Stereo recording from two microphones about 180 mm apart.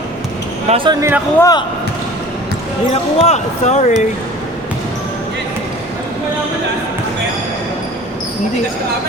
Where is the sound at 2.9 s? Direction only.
35° left (ahead or behind).